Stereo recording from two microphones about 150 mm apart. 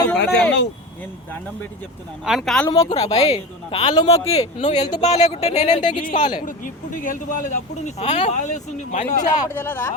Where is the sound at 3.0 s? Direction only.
45° left (ahead or behind).